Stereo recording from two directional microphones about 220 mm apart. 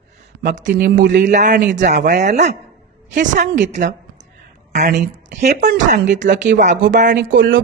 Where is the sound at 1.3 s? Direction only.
35° right (ahead or behind).